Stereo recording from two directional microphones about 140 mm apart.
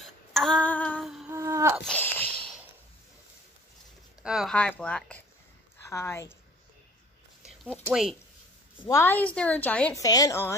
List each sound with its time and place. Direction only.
0.0 s female singing: centre (ahead or behind)
1.3 s a sound: 20° right (ahead or behind)
1.9 s a sound: 15° left (ahead or behind)
4.2 s a sound: 5° right (ahead or behind)
4.6 s a woman's voice: 10° left (ahead or behind)
5.9 s a woman's voice: 20° left (ahead or behind)
7.9 s speech: centre (ahead or behind)
8.8 s a woman's voice: 20° left (ahead or behind)
9.9 s a woman's voice: 25° left (ahead or behind)